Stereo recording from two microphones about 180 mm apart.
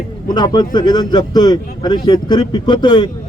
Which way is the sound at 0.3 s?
20° left (ahead or behind).